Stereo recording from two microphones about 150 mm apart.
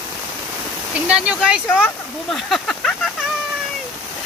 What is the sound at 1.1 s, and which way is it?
Speech, 5° right (ahead or behind).